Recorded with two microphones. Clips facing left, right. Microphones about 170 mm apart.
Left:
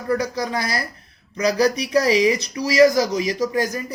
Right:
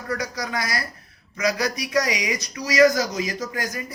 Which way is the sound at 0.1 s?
30° left (ahead or behind).